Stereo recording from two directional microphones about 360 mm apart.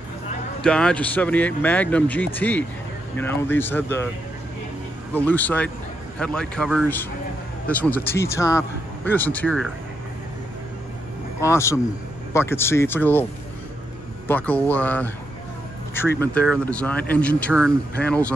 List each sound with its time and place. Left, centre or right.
0.7 s speech: centre
5.1 s speech: centre
11.4 s speech: centre
14.2 s speech: centre